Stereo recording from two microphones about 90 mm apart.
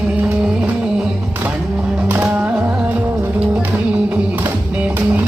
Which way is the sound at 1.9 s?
15° right (ahead or behind).